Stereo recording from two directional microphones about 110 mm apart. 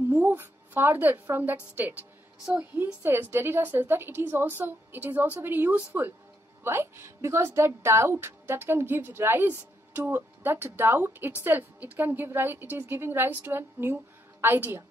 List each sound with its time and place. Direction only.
0.1 s a woman's voice: 15° right (ahead or behind)